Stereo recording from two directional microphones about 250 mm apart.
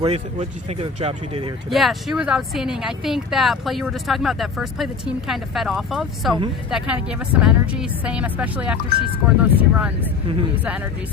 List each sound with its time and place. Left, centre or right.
0.0 s speech: right
1.7 s speech: centre